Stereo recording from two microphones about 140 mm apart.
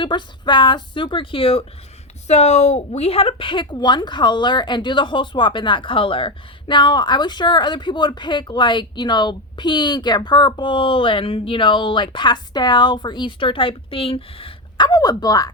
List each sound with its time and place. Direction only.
0.0 s a woman's voice: 35° left (ahead or behind)
2.2 s a woman's voice: 55° left (ahead or behind); by 15.5 s 25° left (ahead or behind)